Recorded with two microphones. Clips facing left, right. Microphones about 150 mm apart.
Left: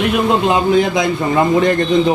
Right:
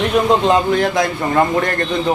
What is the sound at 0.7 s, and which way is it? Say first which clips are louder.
A man's voice: left 2 dB; 15° left (ahead or behind).